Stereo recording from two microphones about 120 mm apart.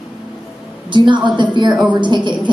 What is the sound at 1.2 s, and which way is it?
Speech, 40° right (ahead or behind).